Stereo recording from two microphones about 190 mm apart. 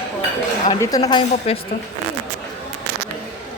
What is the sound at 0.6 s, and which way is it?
Speech, 20° left (ahead or behind).